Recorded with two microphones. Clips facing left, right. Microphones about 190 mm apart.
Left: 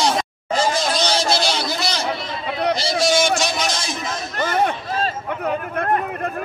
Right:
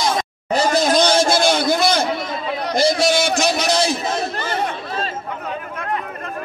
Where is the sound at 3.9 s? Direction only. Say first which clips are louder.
Right 5 dB; 30° right (ahead or behind).